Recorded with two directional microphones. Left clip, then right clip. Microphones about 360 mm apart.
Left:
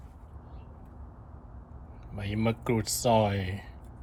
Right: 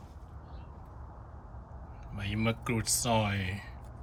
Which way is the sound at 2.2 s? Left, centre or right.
Centre.